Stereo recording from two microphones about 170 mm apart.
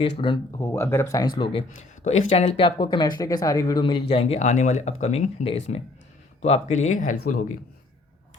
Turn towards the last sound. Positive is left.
turn(degrees=50)  # may be behind; listen again after turning